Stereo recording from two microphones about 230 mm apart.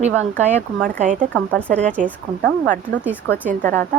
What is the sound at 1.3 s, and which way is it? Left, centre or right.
Speech, centre.